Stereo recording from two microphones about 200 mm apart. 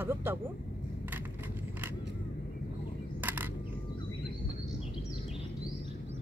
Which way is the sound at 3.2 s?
10° right (ahead or behind).